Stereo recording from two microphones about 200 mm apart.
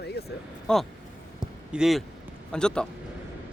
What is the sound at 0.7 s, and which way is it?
Speech, 5° left (ahead or behind).